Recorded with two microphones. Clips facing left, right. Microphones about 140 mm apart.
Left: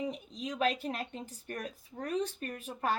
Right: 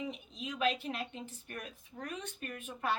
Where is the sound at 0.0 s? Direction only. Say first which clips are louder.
Left 4 dB; 40° left (ahead or behind).